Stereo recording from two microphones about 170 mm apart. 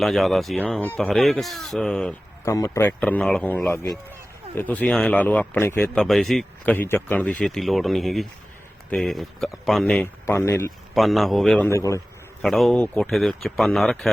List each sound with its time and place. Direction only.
0.0 s speech: centre (ahead or behind)
2.4 s a man's voice: 20° left (ahead or behind); by 6.7 s centre (ahead or behind)
6.7 s a man's voice: 15° left (ahead or behind)
10.9 s speech: centre (ahead or behind)
11.7 s a man's voice: 20° left (ahead or behind)
12.4 s speech: centre (ahead or behind)